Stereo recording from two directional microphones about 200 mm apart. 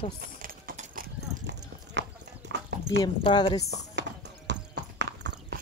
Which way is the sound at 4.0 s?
60° right (ahead or behind).